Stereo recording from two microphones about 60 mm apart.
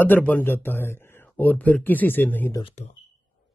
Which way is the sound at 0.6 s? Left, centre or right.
Left.